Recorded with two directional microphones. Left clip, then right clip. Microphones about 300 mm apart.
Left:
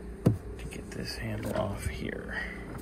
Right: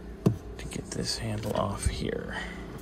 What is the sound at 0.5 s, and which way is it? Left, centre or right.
Whispering, right.